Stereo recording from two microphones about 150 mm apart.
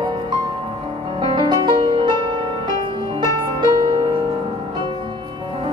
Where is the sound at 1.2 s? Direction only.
35° right (ahead or behind).